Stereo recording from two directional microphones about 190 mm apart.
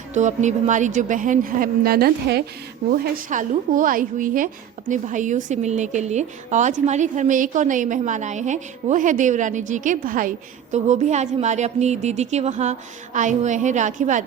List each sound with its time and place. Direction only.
0.1 s a woman's voice: 40° right (ahead or behind)